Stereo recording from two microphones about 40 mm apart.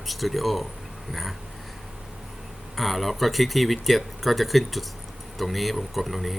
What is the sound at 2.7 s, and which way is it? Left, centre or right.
Speech, centre.